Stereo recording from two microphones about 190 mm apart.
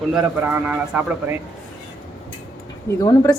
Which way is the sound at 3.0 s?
20° left (ahead or behind).